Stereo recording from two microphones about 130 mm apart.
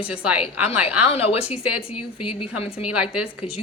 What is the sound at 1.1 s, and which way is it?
Speech, 50° left (ahead or behind).